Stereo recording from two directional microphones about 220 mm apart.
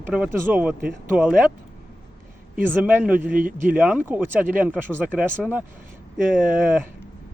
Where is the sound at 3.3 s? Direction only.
40° right (ahead or behind).